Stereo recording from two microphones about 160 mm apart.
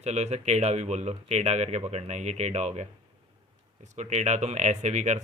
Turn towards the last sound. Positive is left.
turn(degrees=-45)  # may be behind; listen again after turning